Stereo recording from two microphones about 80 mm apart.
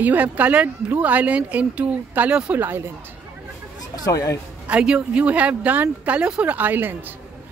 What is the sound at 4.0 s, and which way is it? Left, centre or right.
Speech, left.